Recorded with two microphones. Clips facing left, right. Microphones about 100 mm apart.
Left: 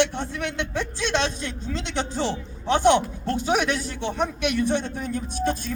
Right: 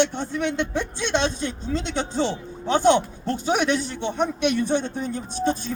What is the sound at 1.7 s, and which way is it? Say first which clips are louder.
Speech: right 5 dB; 20° right (ahead or behind).